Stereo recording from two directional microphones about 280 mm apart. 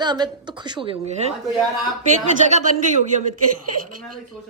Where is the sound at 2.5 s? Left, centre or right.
Right.